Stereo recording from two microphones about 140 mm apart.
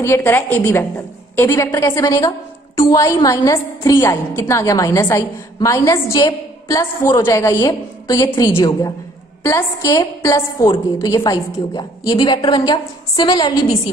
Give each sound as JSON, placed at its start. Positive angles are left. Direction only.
{"t": 0.0, "sound": "a woman's voice", "side_deg": 15}